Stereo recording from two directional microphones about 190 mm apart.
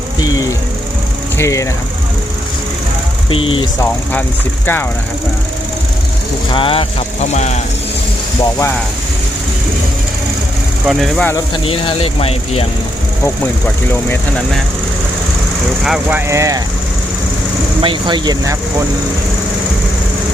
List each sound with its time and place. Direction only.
1.4 s speech: 15° left (ahead or behind)
3.2 s speech: 30° left (ahead or behind)
4.6 s speech: 10° left (ahead or behind)
6.5 s speech: 30° left (ahead or behind)
10.8 s speech: centre (ahead or behind)
11.5 s speech: 30° left (ahead or behind)
14.1 s speech: 5° left (ahead or behind)
15.8 s speech: 5° right (ahead or behind)
17.8 s speech: 25° right (ahead or behind)